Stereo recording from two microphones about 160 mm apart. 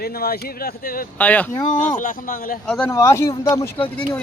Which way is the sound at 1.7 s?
55° left (ahead or behind).